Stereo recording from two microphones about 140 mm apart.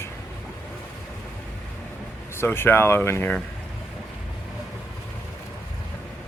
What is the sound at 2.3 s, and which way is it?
Speech, 15° left (ahead or behind).